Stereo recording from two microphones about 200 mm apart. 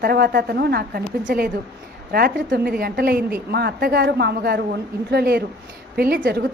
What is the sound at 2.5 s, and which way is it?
A woman's voice, 50° right (ahead or behind).